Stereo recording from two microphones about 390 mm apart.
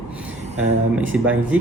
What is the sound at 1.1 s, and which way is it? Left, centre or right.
Speech, centre.